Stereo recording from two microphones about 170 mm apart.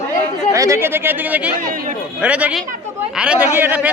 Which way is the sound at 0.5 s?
20° right (ahead or behind).